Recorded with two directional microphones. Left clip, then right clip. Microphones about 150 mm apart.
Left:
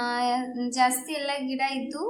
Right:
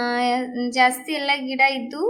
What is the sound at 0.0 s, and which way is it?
Child singing, 15° right (ahead or behind).